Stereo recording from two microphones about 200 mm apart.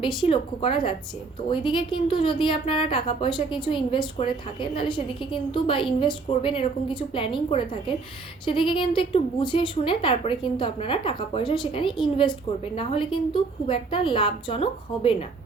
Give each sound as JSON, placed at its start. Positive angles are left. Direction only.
{"t": 0.0, "sound": "a woman's voice", "side_deg": 25}